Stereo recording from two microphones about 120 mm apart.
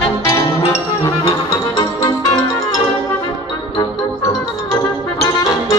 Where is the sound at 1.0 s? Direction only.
30° left (ahead or behind).